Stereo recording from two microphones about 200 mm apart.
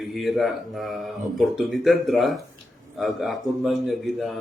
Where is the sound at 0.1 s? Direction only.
Centre (ahead or behind).